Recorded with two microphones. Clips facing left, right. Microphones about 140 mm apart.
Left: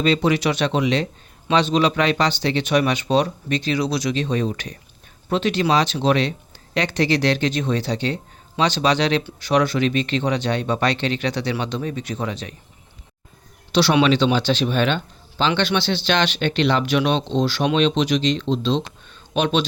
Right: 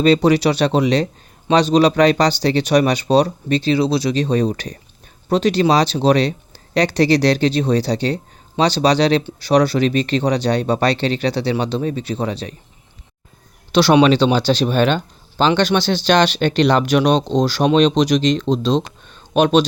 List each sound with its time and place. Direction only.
0.0 s speech: 35° right (ahead or behind)
13.7 s speech: 45° right (ahead or behind)